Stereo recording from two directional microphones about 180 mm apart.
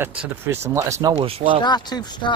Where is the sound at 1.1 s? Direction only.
30° right (ahead or behind).